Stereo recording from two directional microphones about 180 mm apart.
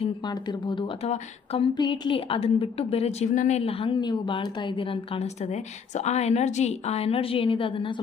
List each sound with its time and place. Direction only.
0.0 s a woman's voice: 25° left (ahead or behind)